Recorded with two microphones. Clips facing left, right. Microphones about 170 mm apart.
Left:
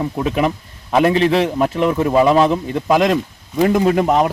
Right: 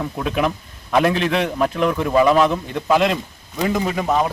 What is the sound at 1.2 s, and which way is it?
A man's voice, 30° left (ahead or behind).